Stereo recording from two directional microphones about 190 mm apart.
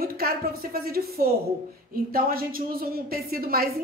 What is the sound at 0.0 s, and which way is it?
A woman's voice, 50° right (ahead or behind).